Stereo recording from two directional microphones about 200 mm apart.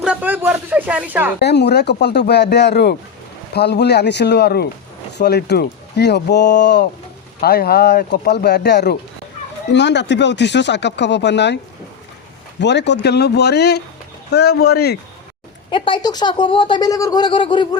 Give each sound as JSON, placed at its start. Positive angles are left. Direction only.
{"t": 0.0, "sound": "speech", "side_deg": -5}
{"t": 1.4, "sound": "speech", "side_deg": 55}
{"t": 15.7, "sound": "speech", "side_deg": 25}